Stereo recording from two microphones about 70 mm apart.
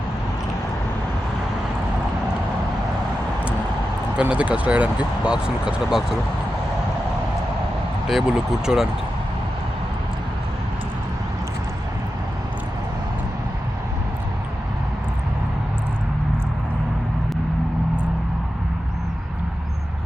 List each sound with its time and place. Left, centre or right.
4.2 s speech: centre
8.0 s speech: centre